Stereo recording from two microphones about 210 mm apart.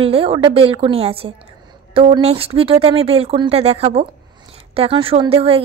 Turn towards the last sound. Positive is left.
turn(degrees=-25)  # may be behind; listen again after turning